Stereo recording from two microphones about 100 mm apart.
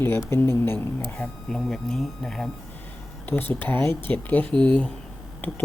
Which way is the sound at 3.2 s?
20° left (ahead or behind).